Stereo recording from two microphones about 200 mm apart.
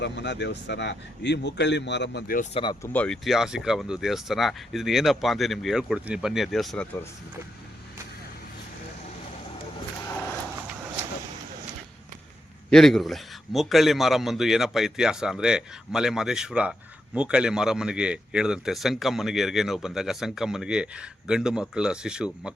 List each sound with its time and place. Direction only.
0.0 s speech: 60° left (ahead or behind)
2.5 s speech: 25° left (ahead or behind)
2.8 s speech: 5° left (ahead or behind)
12.7 s speech: centre (ahead or behind)